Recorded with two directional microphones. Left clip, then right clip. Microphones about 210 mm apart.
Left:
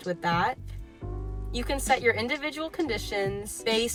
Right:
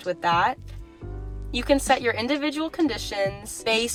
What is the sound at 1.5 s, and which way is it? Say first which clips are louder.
Speech: right 5 dB; 50° right (ahead or behind).